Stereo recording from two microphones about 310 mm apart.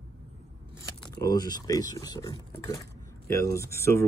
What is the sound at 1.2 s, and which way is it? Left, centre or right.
Speech, centre.